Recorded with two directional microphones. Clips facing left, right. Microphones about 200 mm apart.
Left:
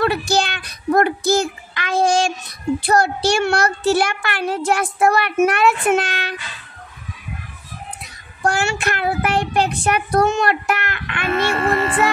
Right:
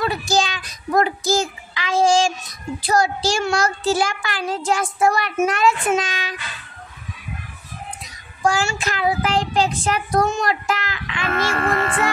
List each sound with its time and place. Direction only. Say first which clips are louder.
0.0 s a child's voice: left 2 dB; 65° left (ahead or behind)
8.0 s a child's voice: right 1 dB; 65° left (ahead or behind)
11.6 s speech: left 3 dB; centre (ahead or behind)